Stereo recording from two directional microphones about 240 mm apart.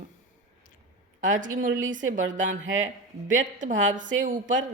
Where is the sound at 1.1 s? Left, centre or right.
Right.